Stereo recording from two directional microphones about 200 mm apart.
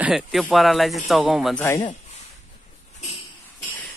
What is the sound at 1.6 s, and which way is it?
Speech, 15° left (ahead or behind).